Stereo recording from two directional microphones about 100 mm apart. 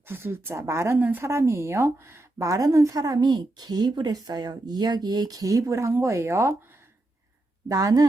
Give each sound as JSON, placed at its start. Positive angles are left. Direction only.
{"t": 0.1, "sound": "speech", "side_deg": -25}
{"t": 7.7, "sound": "speech", "side_deg": -35}